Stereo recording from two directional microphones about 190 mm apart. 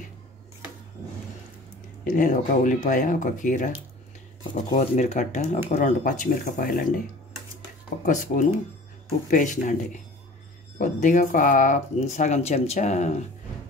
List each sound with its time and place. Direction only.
2.0 s speech: 40° left (ahead or behind)
4.7 s speech: 40° left (ahead or behind)
8.0 s speech: 40° left (ahead or behind)